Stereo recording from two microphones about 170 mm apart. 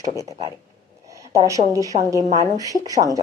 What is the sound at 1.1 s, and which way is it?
A woman's voice, 20° right (ahead or behind).